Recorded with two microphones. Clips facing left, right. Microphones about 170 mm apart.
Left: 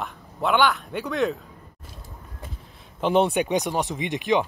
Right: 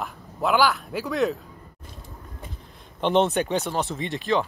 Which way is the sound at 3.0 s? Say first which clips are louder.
Even; 10° left (ahead or behind).